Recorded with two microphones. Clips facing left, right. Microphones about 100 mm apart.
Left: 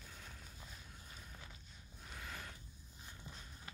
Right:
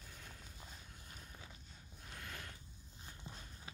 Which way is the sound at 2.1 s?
5° left (ahead or behind).